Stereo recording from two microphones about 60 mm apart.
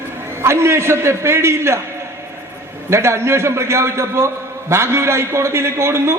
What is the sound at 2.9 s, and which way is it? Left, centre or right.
A man's voice, right.